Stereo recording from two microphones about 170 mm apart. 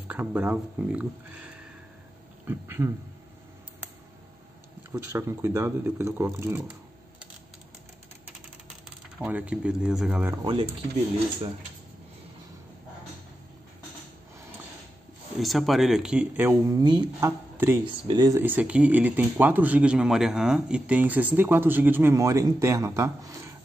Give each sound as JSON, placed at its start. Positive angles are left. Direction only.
{"t": 0.1, "sound": "speech", "side_deg": -10}
{"t": 2.4, "sound": "speech", "side_deg": -15}
{"t": 4.9, "sound": "speech", "side_deg": -15}
{"t": 9.2, "sound": "speech", "side_deg": -5}
{"t": 10.3, "sound": "speech", "side_deg": -25}
{"t": 15.3, "sound": "speech", "side_deg": 0}
{"t": 18.4, "sound": "speech", "side_deg": -10}